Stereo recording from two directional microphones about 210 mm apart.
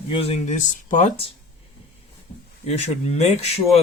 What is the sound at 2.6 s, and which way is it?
Speech, 30° left (ahead or behind).